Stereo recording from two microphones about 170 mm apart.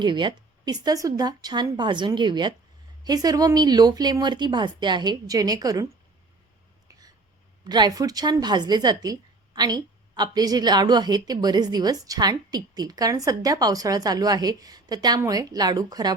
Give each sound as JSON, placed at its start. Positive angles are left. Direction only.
{"t": 0.0, "sound": "a woman's voice", "side_deg": -25}
{"t": 7.6, "sound": "a woman's voice", "side_deg": -25}